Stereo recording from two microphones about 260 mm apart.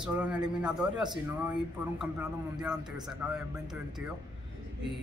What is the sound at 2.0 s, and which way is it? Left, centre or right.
Speech, centre.